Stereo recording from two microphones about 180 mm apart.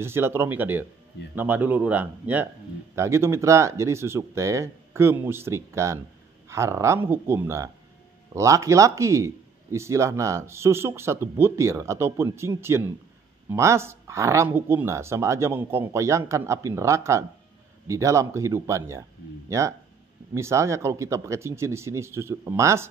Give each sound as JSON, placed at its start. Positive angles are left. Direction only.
{"t": 0.0, "sound": "speech", "side_deg": -15}